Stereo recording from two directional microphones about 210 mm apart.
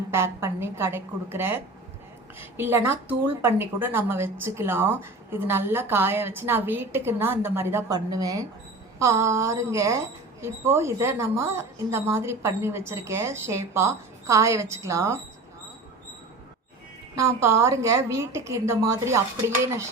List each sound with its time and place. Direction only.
0.1 s a woman's voice: 10° right (ahead or behind)
17.2 s a woman's voice: 15° right (ahead or behind)